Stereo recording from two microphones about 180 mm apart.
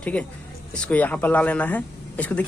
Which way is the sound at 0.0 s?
5° left (ahead or behind).